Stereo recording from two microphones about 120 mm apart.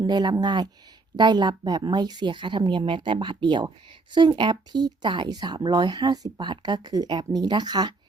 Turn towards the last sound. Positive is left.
turn(degrees=-35)  # may be behind; listen again after turning